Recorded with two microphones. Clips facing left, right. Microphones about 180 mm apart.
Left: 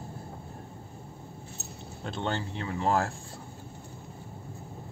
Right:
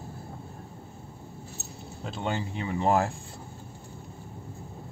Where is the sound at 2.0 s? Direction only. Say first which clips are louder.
Right 1 dB; 10° right (ahead or behind).